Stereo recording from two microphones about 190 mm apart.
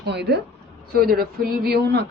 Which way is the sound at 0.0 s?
60° right (ahead or behind).